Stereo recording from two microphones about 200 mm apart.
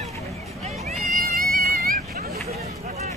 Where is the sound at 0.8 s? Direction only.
45° right (ahead or behind).